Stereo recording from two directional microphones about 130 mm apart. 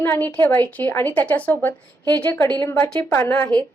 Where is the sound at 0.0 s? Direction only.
15° left (ahead or behind).